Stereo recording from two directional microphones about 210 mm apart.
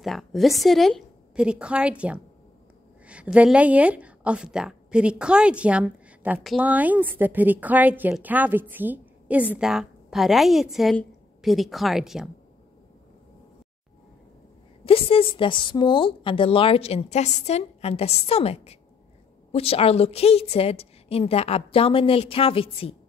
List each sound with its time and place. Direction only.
0.0 s a woman's voice: centre (ahead or behind)
14.9 s a woman's voice: 25° left (ahead or behind)